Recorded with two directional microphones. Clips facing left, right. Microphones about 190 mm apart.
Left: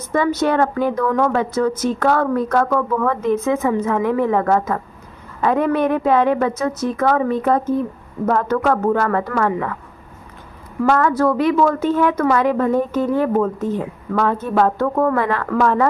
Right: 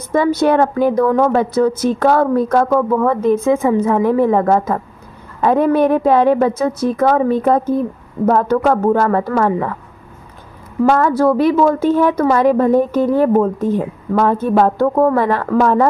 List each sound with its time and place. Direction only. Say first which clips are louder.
0.1 s a woman's voice: right 4 dB; 35° right (ahead or behind)
10.9 s a woman's voice: right 3 dB; 30° right (ahead or behind)